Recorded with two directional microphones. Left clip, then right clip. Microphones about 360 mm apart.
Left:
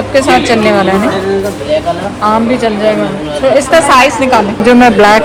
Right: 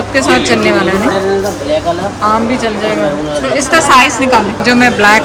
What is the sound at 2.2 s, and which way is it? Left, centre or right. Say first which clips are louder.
A woman's voice: left 3 dB; centre.